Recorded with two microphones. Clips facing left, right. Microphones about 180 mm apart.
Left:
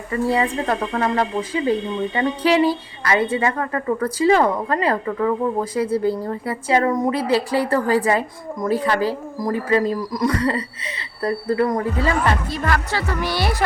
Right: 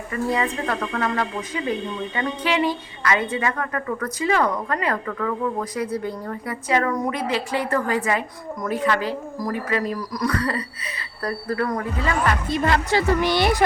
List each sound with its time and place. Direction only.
0.1 s speech: 30° left (ahead or behind)
12.5 s speech: 20° right (ahead or behind)